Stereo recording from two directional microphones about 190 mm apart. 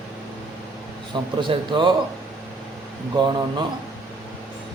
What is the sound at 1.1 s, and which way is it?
Speech, 25° right (ahead or behind).